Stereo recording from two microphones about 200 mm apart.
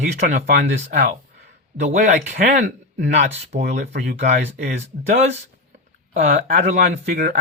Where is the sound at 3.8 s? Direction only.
50° right (ahead or behind).